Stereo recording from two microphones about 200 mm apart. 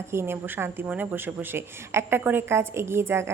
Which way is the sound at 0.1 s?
10° right (ahead or behind).